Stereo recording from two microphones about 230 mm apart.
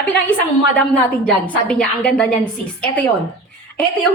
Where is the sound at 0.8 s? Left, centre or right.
Centre.